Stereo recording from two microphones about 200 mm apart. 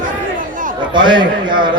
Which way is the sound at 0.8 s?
25° right (ahead or behind).